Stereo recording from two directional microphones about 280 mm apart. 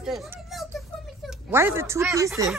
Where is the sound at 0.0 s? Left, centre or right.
Centre.